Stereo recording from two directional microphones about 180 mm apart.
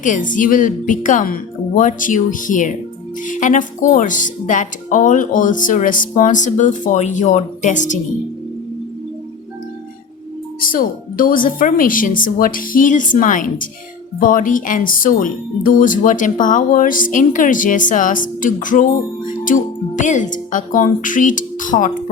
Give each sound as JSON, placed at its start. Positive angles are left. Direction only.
{"t": 0.0, "sound": "speech", "side_deg": 45}
{"t": 10.7, "sound": "speech", "side_deg": 50}